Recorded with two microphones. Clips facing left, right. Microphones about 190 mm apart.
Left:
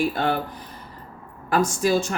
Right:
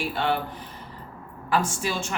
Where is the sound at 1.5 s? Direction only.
40° left (ahead or behind).